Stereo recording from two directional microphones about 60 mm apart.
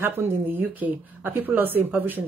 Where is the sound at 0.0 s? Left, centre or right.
Right.